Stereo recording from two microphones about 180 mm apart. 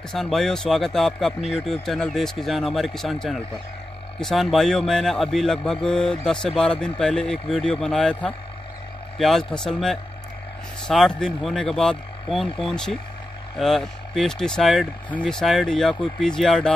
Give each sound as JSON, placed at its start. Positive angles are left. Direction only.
{"t": 0.1, "sound": "speech", "side_deg": 0}